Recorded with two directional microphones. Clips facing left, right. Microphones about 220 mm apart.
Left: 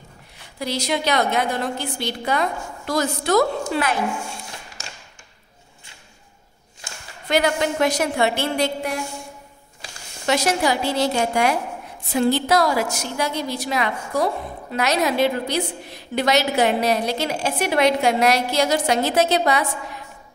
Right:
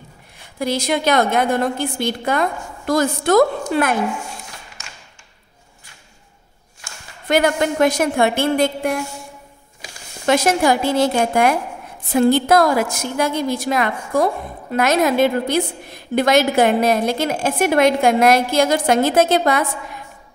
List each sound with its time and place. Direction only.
0.6 s a woman's voice: 50° right (ahead or behind)
7.2 s a woman's voice: 50° right (ahead or behind)
10.2 s a woman's voice: 50° right (ahead or behind)